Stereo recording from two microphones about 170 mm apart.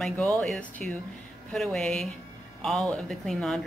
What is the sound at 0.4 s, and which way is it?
Speech, 5° left (ahead or behind).